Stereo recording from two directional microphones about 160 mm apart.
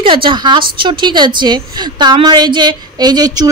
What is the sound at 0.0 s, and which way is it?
A woman's voice, 30° right (ahead or behind).